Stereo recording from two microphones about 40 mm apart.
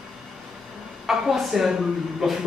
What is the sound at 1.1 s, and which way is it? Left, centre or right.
A woman's voice, centre.